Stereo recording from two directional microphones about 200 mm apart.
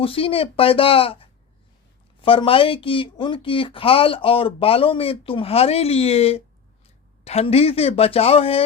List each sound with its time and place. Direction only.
0.0 s speech: 25° left (ahead or behind)